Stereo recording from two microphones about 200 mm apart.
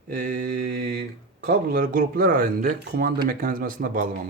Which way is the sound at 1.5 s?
45° right (ahead or behind).